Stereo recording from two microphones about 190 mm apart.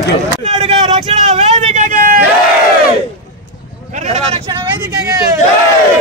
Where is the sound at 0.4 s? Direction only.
30° right (ahead or behind); by 2.2 s 45° right (ahead or behind).